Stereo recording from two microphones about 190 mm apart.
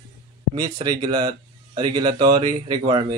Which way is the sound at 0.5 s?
20° right (ahead or behind).